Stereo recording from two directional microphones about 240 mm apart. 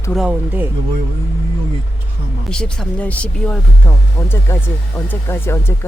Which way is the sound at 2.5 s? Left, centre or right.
Centre.